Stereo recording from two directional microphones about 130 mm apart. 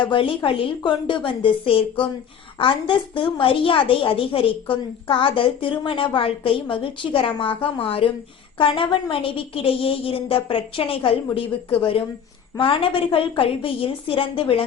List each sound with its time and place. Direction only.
0.0 s a woman's voice: 40° left (ahead or behind)